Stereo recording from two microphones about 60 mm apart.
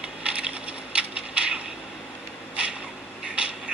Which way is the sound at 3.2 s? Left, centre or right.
Centre.